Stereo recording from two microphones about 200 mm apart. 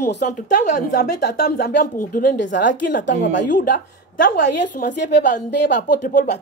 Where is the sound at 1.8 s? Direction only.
45° left (ahead or behind).